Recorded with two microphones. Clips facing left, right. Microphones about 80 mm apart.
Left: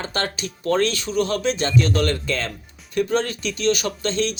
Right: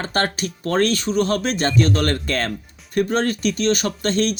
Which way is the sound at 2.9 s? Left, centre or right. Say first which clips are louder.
Right 2 dB; right.